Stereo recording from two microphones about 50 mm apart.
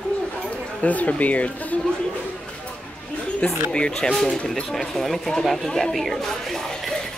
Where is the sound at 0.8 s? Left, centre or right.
Left.